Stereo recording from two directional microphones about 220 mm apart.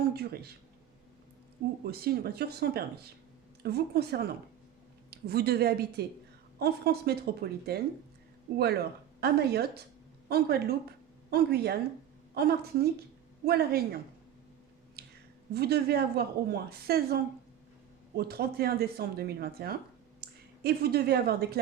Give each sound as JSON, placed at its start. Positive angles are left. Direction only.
{"t": 0.0, "sound": "speech", "side_deg": -45}
{"t": 1.8, "sound": "a woman's voice", "side_deg": -45}
{"t": 15.0, "sound": "a sound", "side_deg": -45}
{"t": 15.5, "sound": "a woman's voice", "side_deg": -45}
{"t": 18.2, "sound": "a woman's voice", "side_deg": -45}